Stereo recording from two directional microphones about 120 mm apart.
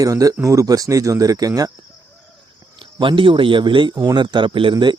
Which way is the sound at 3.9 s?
30° right (ahead or behind).